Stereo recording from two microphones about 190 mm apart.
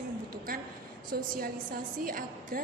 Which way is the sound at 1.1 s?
50° right (ahead or behind).